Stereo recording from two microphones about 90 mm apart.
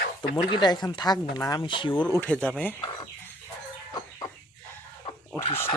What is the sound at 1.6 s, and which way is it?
Speech, 65° left (ahead or behind).